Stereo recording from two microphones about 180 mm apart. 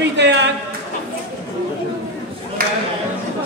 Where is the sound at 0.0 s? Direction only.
75° right (ahead or behind).